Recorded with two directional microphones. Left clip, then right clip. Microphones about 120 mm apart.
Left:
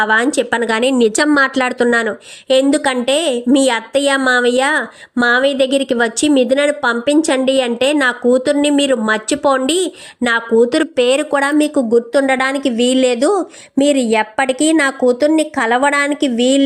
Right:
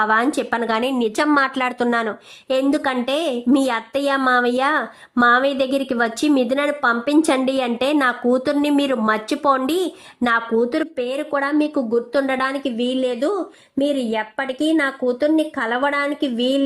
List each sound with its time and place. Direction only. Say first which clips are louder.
0.0 s a woman's voice: left 4 dB; 10° left (ahead or behind)
0.9 s a woman's voice: left 5 dB; 45° left (ahead or behind); by 10.6 s 15° left (ahead or behind)
10.6 s speech: left 8 dB; 35° left (ahead or behind)
12.2 s a woman's voice: left 6 dB; 20° left (ahead or behind)
12.7 s speech: left 8 dB; 35° left (ahead or behind)